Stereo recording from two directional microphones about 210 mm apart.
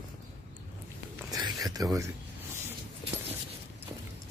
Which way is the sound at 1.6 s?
15° right (ahead or behind).